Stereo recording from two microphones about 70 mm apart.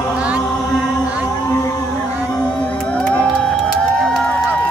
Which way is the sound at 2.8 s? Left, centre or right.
Centre.